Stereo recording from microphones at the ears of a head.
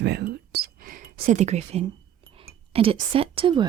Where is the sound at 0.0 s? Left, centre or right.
Right.